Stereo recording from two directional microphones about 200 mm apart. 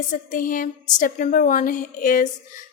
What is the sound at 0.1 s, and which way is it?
A woman's voice, 40° left (ahead or behind).